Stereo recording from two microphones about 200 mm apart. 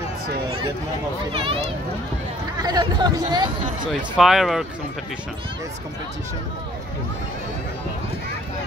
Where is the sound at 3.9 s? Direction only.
Centre (ahead or behind).